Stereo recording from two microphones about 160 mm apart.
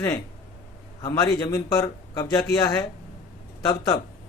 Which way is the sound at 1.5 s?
20° left (ahead or behind).